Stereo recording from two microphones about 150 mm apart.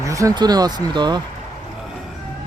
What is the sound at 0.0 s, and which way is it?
Speech, 20° right (ahead or behind).